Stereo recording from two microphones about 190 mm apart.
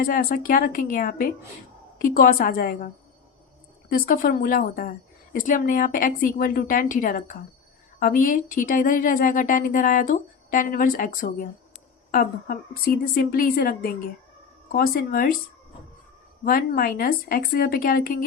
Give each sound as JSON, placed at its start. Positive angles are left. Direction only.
{"t": 0.0, "sound": "a woman's voice", "side_deg": 50}
{"t": 16.4, "sound": "a woman's voice", "side_deg": 50}